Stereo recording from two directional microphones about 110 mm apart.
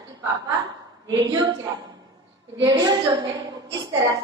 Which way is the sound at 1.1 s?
35° right (ahead or behind).